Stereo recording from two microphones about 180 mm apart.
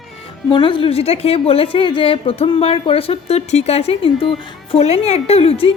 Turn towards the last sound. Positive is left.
turn(degrees=35)  # may be behind; listen again after turning